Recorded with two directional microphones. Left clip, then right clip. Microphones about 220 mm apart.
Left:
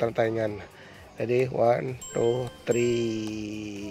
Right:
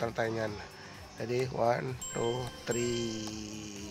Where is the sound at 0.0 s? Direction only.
25° left (ahead or behind).